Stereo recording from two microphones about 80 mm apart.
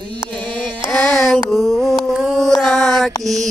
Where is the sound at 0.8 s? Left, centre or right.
Centre.